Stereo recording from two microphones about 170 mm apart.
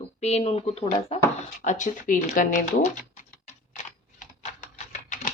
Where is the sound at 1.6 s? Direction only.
45° left (ahead or behind).